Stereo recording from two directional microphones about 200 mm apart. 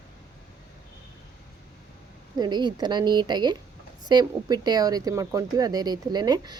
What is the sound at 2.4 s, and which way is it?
Speech, 20° right (ahead or behind).